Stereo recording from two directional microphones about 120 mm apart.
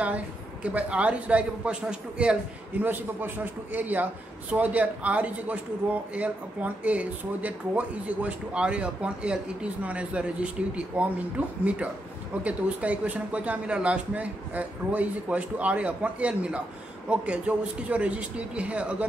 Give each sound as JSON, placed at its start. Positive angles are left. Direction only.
{"t": 0.0, "sound": "a man's voice", "side_deg": -10}